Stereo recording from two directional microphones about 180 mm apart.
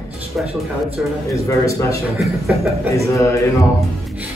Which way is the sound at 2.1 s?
Centre (ahead or behind).